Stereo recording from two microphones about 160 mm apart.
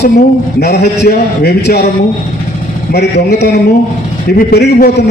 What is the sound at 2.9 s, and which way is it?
Speech, 90° left.